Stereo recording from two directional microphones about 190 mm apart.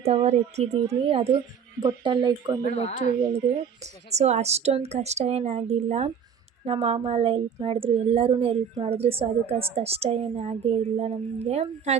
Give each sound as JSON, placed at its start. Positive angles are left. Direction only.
{"t": 0.0, "sound": "a woman's voice", "side_deg": -35}
{"t": 2.6, "sound": "speech", "side_deg": 40}
{"t": 4.1, "sound": "a woman's voice", "side_deg": -35}